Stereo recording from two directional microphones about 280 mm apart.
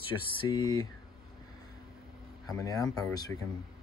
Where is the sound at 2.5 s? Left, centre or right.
Centre.